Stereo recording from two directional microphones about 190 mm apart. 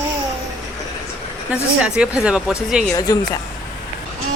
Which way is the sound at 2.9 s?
20° left (ahead or behind).